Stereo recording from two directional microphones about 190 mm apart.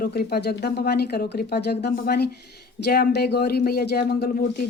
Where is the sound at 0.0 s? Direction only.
55° left (ahead or behind).